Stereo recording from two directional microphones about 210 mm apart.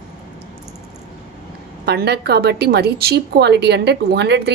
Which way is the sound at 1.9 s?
50° right (ahead or behind).